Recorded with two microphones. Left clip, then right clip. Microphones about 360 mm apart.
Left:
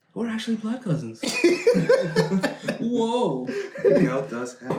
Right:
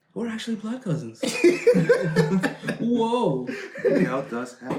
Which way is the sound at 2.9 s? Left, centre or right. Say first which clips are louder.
Right 1 dB; centre.